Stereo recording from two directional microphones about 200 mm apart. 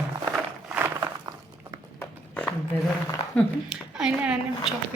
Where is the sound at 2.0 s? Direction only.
10° left (ahead or behind).